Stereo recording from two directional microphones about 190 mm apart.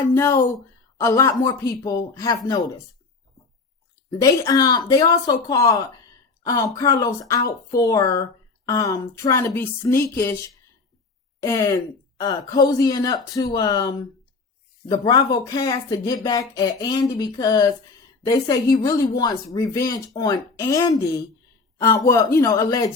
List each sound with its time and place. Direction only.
0.1 s speech: 15° left (ahead or behind)
4.2 s speech: 20° left (ahead or behind)
11.4 s speech: 15° left (ahead or behind)